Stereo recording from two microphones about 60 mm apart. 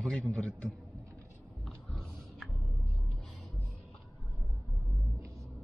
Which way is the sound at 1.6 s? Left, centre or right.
Centre.